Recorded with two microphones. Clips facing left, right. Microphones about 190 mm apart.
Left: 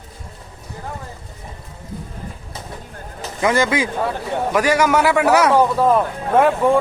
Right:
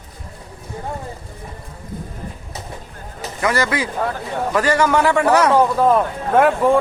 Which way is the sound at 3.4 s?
20° left (ahead or behind).